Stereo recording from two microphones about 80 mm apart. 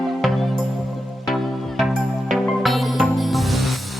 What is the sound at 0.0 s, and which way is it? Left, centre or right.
Music, centre.